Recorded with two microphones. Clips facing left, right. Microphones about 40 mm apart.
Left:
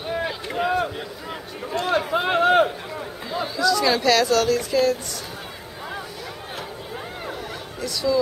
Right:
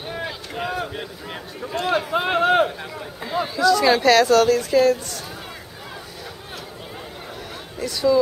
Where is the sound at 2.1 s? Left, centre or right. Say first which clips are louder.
Left 1 dB; centre.